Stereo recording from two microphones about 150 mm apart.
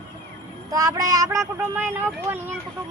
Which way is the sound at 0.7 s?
25° right (ahead or behind).